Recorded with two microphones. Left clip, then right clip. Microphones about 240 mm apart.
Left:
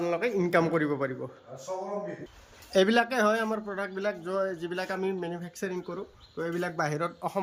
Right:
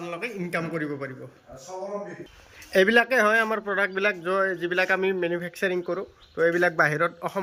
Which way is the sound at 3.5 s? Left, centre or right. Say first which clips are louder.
Right 8 dB; centre.